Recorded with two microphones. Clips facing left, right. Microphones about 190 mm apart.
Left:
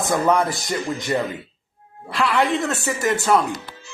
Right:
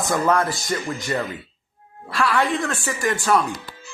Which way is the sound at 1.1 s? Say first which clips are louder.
Left 3 dB; 20° left (ahead or behind).